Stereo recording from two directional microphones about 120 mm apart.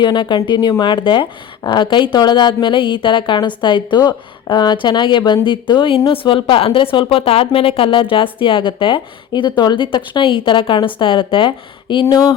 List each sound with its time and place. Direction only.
0.0 s a woman's voice: 40° left (ahead or behind)